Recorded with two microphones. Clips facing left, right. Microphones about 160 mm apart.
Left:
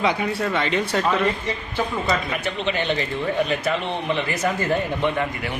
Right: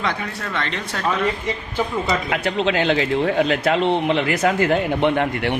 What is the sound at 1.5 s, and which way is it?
Speech, 15° right (ahead or behind).